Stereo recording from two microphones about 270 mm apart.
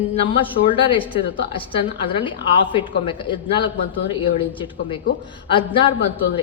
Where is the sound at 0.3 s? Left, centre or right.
Centre.